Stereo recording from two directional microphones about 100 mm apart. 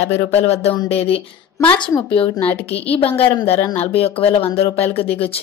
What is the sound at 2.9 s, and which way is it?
Speech, 75° left (ahead or behind).